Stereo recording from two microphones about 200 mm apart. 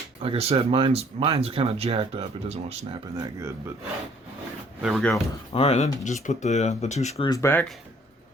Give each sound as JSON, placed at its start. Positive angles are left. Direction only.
{"t": 0.2, "sound": "speech", "side_deg": -30}
{"t": 3.2, "sound": "speech", "side_deg": -15}
{"t": 4.8, "sound": "speech", "side_deg": 0}
{"t": 5.5, "sound": "speech", "side_deg": 30}
{"t": 7.3, "sound": "speech", "side_deg": 15}